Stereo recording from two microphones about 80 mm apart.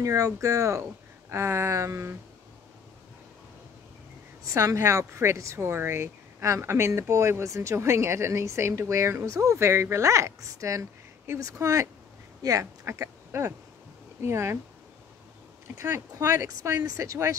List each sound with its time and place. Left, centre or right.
0.0 s speech: right
4.5 s speech: right
15.8 s speech: right